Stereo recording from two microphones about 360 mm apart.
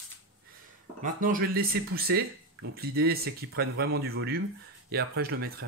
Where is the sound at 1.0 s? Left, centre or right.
Right.